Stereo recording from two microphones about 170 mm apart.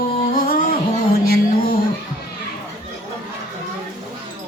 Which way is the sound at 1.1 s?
60° left (ahead or behind).